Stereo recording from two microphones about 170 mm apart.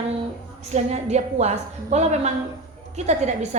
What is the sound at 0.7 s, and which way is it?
A woman's voice, 40° right (ahead or behind).